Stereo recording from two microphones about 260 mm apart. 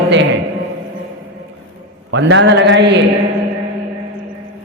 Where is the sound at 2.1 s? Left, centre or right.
Right.